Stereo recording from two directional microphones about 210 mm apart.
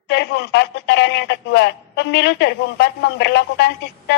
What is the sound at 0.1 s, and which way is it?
A woman's voice, 55° left (ahead or behind).